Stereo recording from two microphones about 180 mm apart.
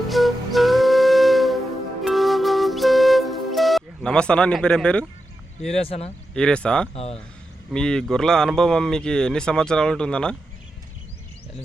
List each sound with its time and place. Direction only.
0.1 s flute: centre (ahead or behind)
2.0 s music: centre (ahead or behind)
5.7 s speech: 35° left (ahead or behind)
6.3 s speech: 5° left (ahead or behind)
6.9 s speech: 35° left (ahead or behind)
7.7 s speech: 5° left (ahead or behind)